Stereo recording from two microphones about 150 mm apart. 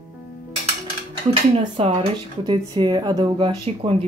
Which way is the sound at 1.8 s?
40° right (ahead or behind).